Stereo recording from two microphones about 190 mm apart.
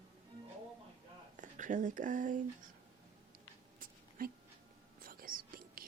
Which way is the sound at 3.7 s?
45° right (ahead or behind).